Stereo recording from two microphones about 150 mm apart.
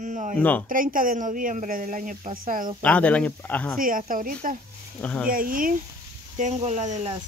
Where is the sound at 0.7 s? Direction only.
65° right (ahead or behind).